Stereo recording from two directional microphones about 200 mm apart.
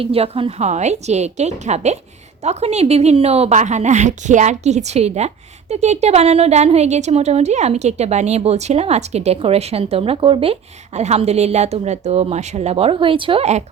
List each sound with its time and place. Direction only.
0.0 s a woman's voice: 30° right (ahead or behind)